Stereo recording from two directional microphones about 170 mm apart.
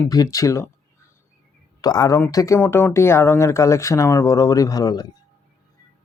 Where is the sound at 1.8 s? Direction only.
25° left (ahead or behind).